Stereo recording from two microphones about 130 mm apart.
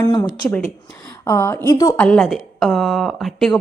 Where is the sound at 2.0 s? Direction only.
5° left (ahead or behind).